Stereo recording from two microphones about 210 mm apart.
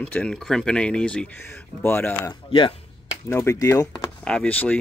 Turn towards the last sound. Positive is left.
turn(degrees=5)  # may be behind; listen again after turning